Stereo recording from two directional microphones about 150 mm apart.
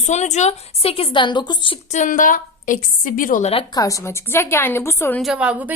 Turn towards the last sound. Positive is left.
turn(degrees=-10)  # may be behind; listen again after turning